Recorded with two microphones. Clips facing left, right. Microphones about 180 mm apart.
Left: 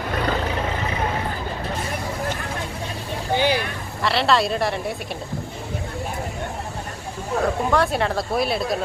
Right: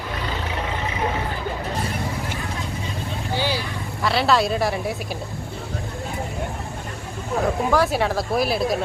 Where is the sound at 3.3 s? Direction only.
15° left (ahead or behind).